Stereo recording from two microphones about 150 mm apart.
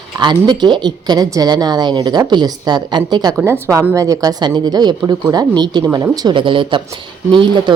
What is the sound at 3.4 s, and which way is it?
A woman's voice, 15° right (ahead or behind).